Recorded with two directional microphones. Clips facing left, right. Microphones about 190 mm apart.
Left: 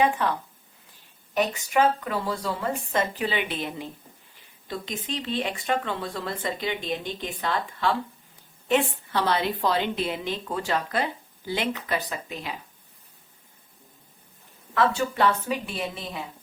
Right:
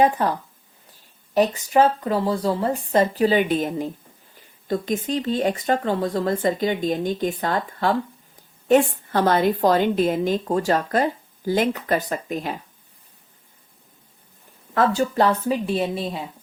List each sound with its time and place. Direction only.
0.0 s a woman's voice: 40° right (ahead or behind)
14.8 s speech: 40° right (ahead or behind)